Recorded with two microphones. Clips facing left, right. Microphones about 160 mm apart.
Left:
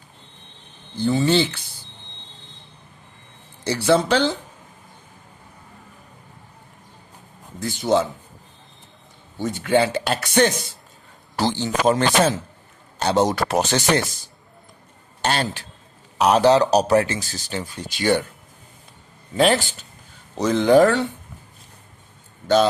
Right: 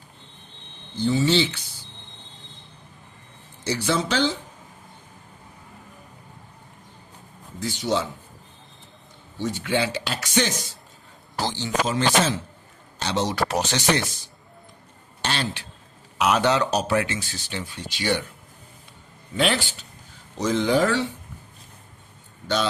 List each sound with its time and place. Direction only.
1.0 s a man's voice: 55° left (ahead or behind)
3.6 s a man's voice: 55° left (ahead or behind)
7.6 s speech: 50° left (ahead or behind)
9.4 s a man's voice: 50° left (ahead or behind)
15.2 s a man's voice: 45° left (ahead or behind)
16.1 s speech: 35° left (ahead or behind)
19.4 s speech: 45° left (ahead or behind)
20.3 s a man's voice: 60° left (ahead or behind)